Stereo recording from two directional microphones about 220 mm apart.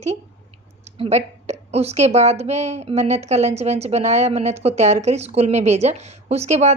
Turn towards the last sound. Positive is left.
turn(degrees=-30)  # may be behind; listen again after turning